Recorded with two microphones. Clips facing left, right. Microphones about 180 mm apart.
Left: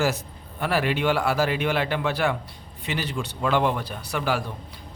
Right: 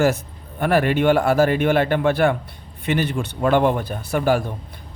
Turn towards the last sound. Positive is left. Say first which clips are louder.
# right 7 dB
turn(degrees=-50)  # may be behind; listen again after turning